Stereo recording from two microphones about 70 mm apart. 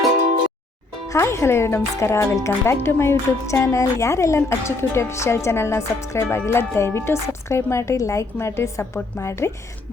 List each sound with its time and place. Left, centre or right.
1.1 s a woman's voice: left